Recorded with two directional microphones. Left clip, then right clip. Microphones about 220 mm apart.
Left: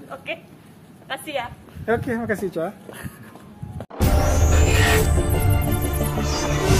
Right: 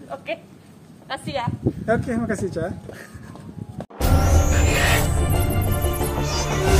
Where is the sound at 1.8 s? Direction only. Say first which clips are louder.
Left 1 dB; 40° left (ahead or behind).